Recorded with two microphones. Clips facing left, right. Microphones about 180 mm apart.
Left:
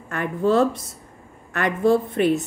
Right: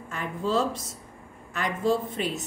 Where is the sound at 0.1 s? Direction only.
60° left (ahead or behind).